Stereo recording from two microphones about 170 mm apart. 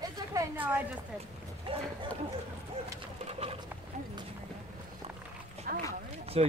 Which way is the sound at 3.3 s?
35° right (ahead or behind).